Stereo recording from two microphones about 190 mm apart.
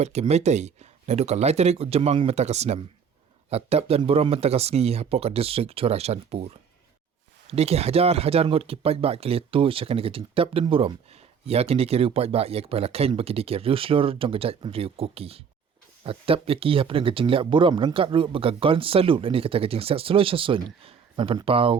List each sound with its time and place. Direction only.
0.0 s speech: 35° right (ahead or behind)